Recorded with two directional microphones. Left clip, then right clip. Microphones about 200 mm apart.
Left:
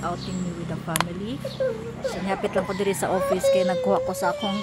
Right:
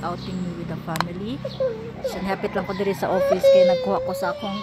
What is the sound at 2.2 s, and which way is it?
Speech, 10° right (ahead or behind).